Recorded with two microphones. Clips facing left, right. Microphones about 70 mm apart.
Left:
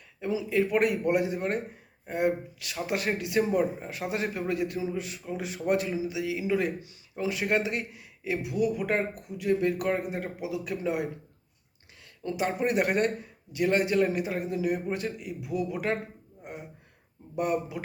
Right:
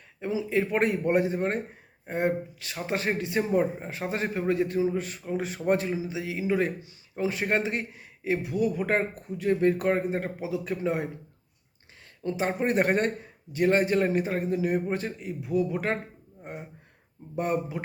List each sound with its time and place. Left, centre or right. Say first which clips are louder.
0.2 s a man's voice: even; right
12.2 s a man's voice: right 1 dB; right
17.3 s a man's voice: even; right